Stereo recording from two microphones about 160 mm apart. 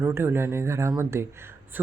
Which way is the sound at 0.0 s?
15° right (ahead or behind).